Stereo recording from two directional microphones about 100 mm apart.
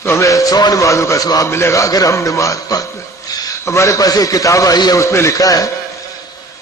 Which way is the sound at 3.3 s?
40° left (ahead or behind).